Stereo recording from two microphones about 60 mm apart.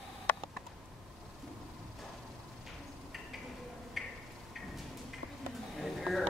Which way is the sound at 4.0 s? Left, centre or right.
Centre.